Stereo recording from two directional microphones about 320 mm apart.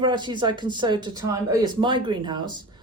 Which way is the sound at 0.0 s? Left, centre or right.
Centre.